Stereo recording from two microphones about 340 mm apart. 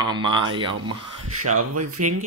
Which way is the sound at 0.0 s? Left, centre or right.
Centre.